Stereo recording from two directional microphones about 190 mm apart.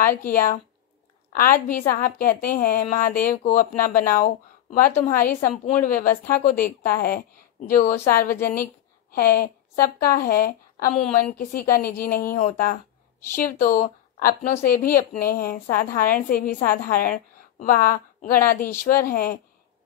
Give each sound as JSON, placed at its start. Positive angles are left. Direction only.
{"t": 0.0, "sound": "a woman's voice", "side_deg": 50}